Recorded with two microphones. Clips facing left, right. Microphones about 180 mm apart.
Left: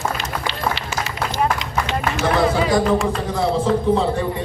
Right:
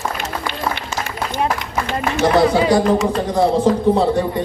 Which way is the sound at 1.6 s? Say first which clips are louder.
Right 1 dB; 55° right (ahead or behind).